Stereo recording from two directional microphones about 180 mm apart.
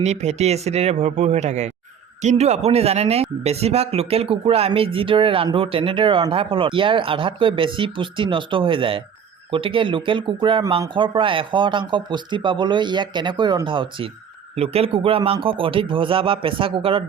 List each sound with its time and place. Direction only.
0.0 s speech: 40° right (ahead or behind)